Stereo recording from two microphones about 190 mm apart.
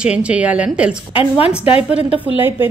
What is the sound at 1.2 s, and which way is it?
Speech, 30° left (ahead or behind).